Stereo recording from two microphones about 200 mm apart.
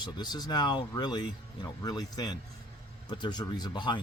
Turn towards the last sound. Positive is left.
turn(degrees=20)  # may be behind; listen again after turning